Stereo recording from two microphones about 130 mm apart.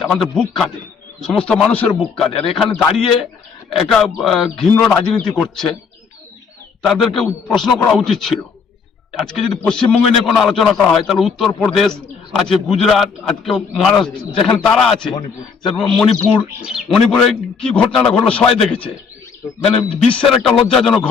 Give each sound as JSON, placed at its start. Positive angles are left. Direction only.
{"t": 0.0, "sound": "a man's voice", "side_deg": 5}
{"t": 6.8, "sound": "a man's voice", "side_deg": 0}
{"t": 19.9, "sound": "a man's voice", "side_deg": 0}